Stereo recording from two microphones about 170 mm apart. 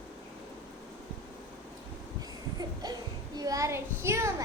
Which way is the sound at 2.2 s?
25° right (ahead or behind).